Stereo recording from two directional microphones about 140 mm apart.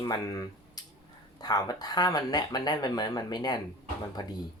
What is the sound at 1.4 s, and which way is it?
Speech, 30° left (ahead or behind).